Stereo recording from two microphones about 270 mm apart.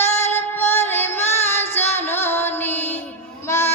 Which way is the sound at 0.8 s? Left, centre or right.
Centre.